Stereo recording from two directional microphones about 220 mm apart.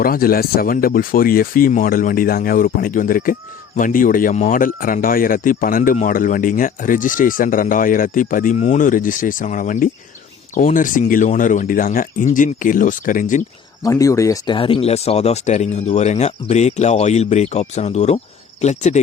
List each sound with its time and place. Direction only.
0.0 s speech: 40° left (ahead or behind)
13.8 s speech: 15° left (ahead or behind); by 18.9 s 30° left (ahead or behind)